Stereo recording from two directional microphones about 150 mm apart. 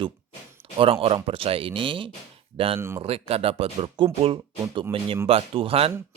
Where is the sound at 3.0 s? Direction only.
40° right (ahead or behind).